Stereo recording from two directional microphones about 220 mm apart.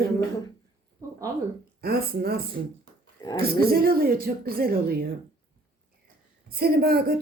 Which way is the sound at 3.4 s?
45° right (ahead or behind).